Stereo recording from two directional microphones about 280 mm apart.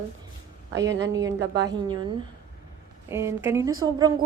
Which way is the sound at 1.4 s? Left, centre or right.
Right.